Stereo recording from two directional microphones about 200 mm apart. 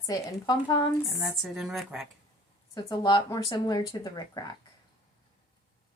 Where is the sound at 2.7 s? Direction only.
20° left (ahead or behind).